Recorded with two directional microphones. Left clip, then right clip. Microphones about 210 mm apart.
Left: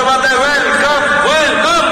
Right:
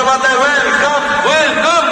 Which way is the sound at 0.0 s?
5° right (ahead or behind).